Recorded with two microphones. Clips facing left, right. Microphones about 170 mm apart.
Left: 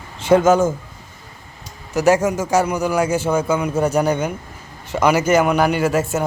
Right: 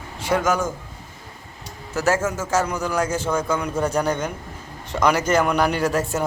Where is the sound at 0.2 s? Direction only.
25° left (ahead or behind).